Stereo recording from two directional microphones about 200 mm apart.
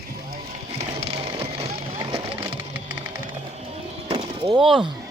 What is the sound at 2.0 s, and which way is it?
Vehicle, 20° right (ahead or behind).